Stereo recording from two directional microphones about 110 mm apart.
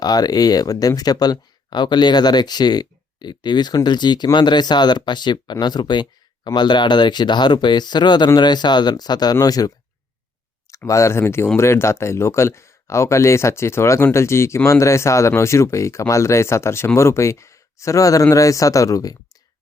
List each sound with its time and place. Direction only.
0.0 s speech: 35° left (ahead or behind)